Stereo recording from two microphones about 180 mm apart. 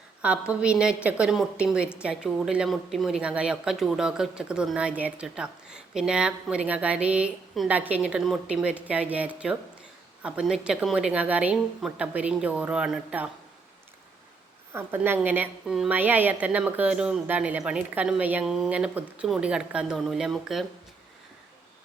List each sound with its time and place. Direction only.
0.2 s a woman's voice: 5° right (ahead or behind)
14.7 s a woman's voice: 15° right (ahead or behind)